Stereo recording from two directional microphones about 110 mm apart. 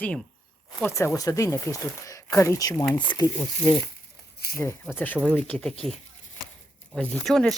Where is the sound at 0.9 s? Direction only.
25° left (ahead or behind).